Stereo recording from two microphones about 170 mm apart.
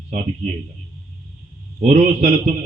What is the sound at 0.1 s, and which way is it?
Speech, 40° right (ahead or behind).